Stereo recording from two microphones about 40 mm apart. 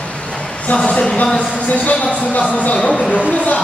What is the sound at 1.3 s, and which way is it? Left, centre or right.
A man's voice, left.